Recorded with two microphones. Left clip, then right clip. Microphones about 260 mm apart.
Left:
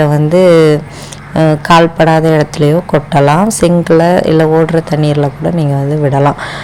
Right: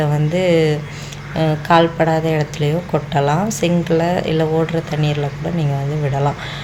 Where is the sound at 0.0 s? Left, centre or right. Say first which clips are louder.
Left 10 dB; left.